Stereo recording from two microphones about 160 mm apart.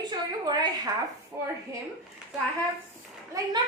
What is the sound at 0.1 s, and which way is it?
Speech, 25° right (ahead or behind).